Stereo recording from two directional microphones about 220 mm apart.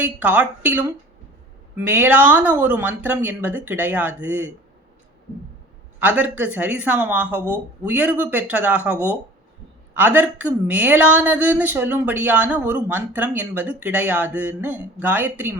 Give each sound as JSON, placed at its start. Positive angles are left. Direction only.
{"t": 0.0, "sound": "speech", "side_deg": -5}
{"t": 6.0, "sound": "speech", "side_deg": -5}